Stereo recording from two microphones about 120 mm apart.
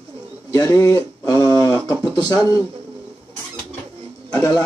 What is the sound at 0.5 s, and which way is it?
A man's voice, 25° left (ahead or behind).